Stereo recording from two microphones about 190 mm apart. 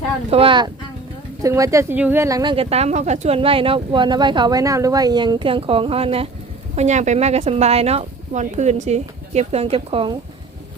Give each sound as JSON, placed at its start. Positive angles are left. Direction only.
{"t": 0.3, "sound": "speech", "side_deg": -30}